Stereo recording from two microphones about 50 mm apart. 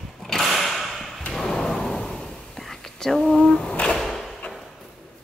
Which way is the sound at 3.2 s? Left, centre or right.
Centre.